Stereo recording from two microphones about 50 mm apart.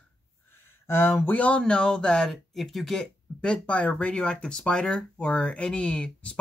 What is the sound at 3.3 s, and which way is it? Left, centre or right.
Speech, left.